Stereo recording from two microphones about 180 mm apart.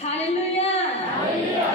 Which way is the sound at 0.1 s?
35° left (ahead or behind).